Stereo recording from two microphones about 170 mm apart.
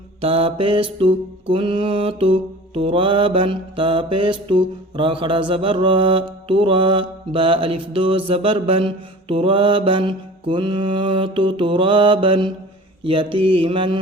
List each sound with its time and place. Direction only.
0.2 s mantra: 35° right (ahead or behind)